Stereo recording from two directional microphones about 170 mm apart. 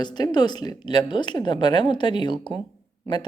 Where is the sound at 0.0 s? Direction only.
25° left (ahead or behind).